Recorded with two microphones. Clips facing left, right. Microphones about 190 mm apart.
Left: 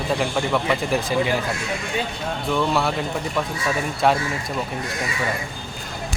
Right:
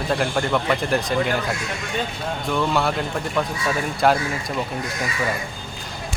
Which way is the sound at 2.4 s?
Centre (ahead or behind).